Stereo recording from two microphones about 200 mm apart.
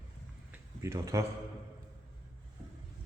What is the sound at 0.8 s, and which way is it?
Speech, 15° right (ahead or behind).